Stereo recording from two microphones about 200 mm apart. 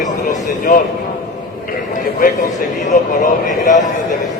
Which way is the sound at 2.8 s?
40° left (ahead or behind).